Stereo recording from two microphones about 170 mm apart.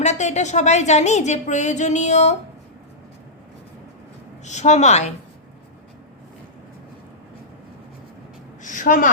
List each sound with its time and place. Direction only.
0.0 s a woman's voice: 45° left (ahead or behind)
4.4 s a woman's voice: 45° left (ahead or behind)
8.6 s a woman's voice: 50° left (ahead or behind)